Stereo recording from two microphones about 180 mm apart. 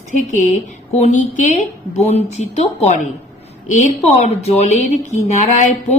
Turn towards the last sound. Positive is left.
turn(degrees=40)  # may be behind; listen again after turning